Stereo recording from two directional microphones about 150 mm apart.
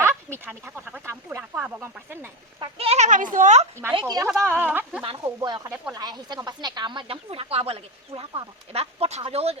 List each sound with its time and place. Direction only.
0.0 s speech: 15° right (ahead or behind)
2.6 s speech: 40° right (ahead or behind)
4.0 s speech: 20° right (ahead or behind)
4.3 s speech: 5° left (ahead or behind)
4.7 s speech: 10° right (ahead or behind)
5.2 s speech: 25° right (ahead or behind)
8.7 s speech: 45° right (ahead or behind)